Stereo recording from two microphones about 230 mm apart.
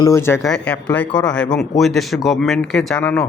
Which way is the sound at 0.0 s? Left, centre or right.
Centre.